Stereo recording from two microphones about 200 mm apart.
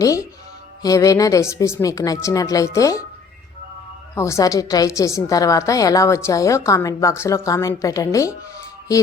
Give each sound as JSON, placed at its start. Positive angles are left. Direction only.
{"t": 0.0, "sound": "a woman's voice", "side_deg": 15}
{"t": 4.1, "sound": "a woman's voice", "side_deg": 15}